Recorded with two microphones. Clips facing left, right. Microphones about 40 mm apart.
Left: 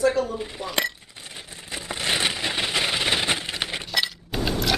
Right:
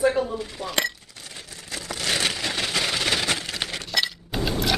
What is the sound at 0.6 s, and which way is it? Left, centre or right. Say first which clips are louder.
Speech: even; centre.